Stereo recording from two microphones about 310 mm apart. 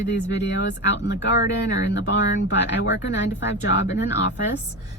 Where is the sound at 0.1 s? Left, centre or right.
Left.